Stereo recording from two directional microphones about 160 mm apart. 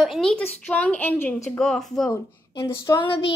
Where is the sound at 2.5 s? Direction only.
30° left (ahead or behind).